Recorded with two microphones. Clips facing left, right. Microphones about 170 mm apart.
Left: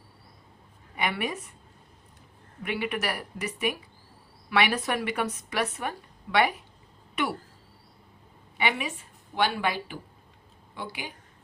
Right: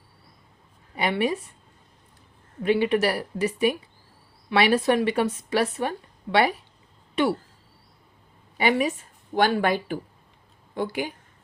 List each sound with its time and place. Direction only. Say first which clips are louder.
0.9 s a woman's voice: right 6 dB; 30° right (ahead or behind)
2.6 s speech: right 9 dB; 30° right (ahead or behind)
7.2 s speech: right 7 dB; 30° right (ahead or behind)
8.5 s a woman's voice: right 7 dB; 40° right (ahead or behind)